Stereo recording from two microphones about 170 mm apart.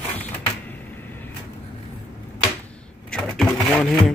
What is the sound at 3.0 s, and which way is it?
Sewing machine, centre (ahead or behind).